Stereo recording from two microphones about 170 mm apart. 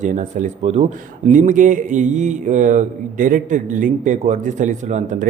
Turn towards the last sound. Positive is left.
turn(degrees=-45)  # may be behind; listen again after turning